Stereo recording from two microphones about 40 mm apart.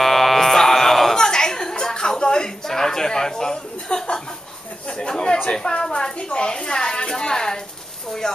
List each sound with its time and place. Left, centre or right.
0.0 s electric shaver: centre
1.1 s a sound: centre
4.8 s a woman's voice: left